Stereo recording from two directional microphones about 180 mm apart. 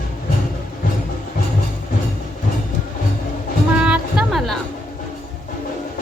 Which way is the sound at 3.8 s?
5° right (ahead or behind).